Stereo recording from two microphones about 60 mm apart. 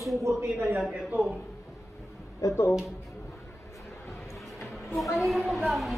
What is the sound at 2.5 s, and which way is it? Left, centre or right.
Speech, left.